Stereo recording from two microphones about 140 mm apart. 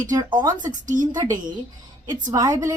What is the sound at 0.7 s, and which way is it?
Speech, 65° right (ahead or behind).